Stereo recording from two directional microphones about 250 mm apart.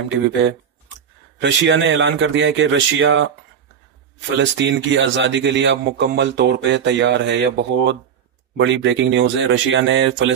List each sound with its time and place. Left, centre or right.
1.4 s speech: right
4.4 s speech: right